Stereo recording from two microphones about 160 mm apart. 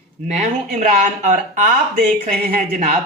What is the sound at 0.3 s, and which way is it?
Speech, 50° right (ahead or behind).